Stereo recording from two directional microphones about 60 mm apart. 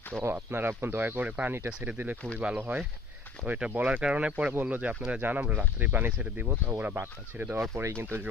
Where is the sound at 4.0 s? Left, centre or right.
Centre.